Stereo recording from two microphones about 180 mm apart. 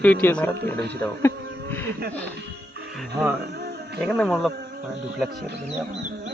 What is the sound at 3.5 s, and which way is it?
Music, 65° right (ahead or behind).